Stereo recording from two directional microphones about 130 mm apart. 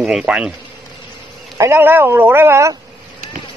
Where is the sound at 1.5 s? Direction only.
20° right (ahead or behind).